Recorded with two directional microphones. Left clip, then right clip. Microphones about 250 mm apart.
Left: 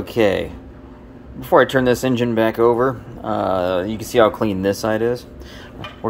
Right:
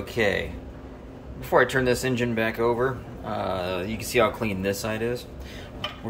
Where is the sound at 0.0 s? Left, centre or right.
Left.